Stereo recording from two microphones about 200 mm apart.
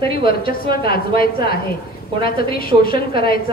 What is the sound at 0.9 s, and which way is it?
A woman's voice, 50° left (ahead or behind).